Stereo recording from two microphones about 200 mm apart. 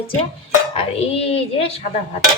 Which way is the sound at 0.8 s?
30° left (ahead or behind).